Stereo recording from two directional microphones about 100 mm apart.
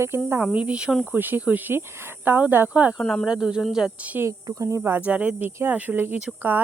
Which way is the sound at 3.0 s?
5° left (ahead or behind).